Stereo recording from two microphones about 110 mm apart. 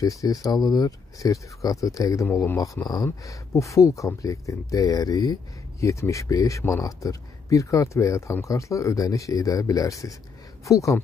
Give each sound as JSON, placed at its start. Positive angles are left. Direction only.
{"t": 0.0, "sound": "speech", "side_deg": 35}